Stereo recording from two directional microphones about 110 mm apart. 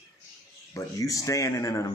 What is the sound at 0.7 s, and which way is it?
A man's voice, 30° left (ahead or behind).